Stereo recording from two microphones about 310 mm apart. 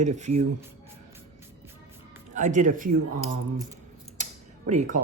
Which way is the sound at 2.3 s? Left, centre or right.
Right.